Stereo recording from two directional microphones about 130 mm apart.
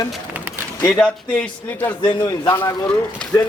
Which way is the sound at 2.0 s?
30° left (ahead or behind).